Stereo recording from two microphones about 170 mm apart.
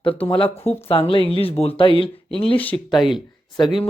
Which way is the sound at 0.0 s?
35° left (ahead or behind).